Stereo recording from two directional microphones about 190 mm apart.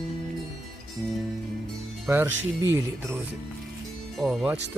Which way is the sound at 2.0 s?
10° right (ahead or behind).